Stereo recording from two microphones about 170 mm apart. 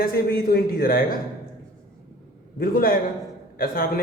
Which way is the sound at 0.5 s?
60° left (ahead or behind).